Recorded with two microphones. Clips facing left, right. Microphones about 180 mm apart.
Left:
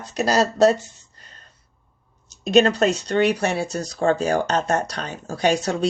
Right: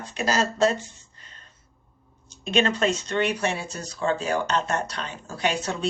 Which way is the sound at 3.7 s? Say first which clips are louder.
Left 8 dB; 75° left (ahead or behind).